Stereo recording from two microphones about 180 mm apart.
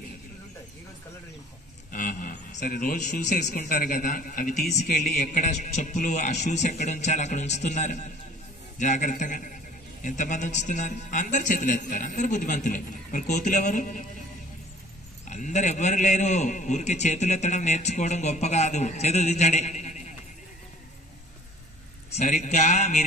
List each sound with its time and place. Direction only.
1.9 s a man's voice: 50° left (ahead or behind)
15.2 s a man's voice: 40° left (ahead or behind)
22.3 s a man's voice: 40° left (ahead or behind)